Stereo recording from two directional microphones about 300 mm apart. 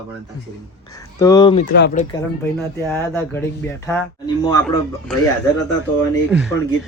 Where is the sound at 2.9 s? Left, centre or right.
Centre.